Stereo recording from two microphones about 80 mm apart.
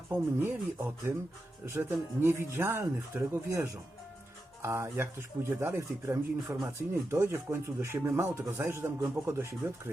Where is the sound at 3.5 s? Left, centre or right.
Right.